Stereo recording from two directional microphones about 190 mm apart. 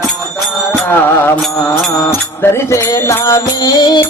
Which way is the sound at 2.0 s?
15° left (ahead or behind).